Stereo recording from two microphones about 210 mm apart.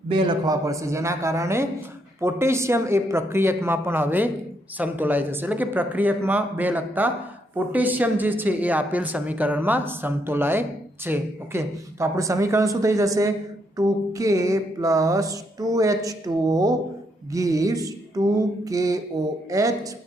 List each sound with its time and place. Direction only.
0.1 s speech: 20° right (ahead or behind)